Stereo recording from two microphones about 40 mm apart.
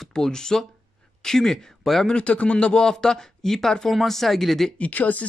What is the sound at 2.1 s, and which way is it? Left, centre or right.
Speech, left.